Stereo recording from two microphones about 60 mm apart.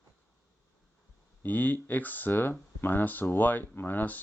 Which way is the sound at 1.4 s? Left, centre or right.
Left.